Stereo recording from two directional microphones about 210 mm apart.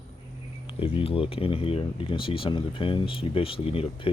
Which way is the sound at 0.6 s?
25° left (ahead or behind).